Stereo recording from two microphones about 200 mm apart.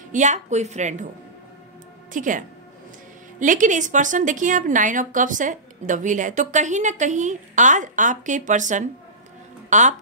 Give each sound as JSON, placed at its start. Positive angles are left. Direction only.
{"t": 0.1, "sound": "a woman's voice", "side_deg": -35}
{"t": 2.1, "sound": "a woman's voice", "side_deg": -40}